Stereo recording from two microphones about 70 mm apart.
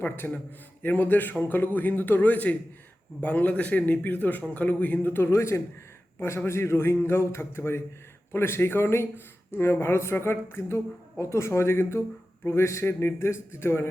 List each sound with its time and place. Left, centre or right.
0.0 s a man's voice: left